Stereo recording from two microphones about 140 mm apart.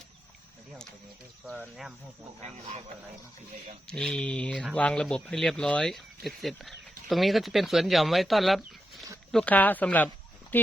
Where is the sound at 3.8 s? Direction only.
5° left (ahead or behind).